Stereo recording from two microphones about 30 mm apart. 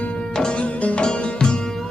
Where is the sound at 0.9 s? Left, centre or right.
Left.